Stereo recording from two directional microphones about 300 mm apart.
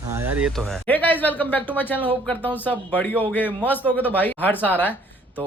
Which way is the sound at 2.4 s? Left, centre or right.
Centre.